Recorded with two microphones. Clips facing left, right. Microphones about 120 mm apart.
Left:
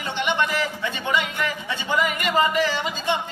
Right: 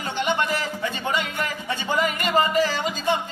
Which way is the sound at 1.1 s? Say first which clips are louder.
Left 4 dB; 40° right (ahead or behind).